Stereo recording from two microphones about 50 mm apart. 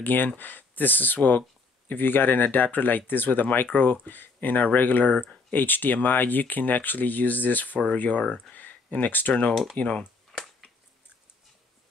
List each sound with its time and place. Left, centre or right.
0.0 s speech: left
8.2 s speech: centre
8.5 s a sound: left
9.5 s speech: centre
9.8 s speech: left
10.3 s finger snapping: centre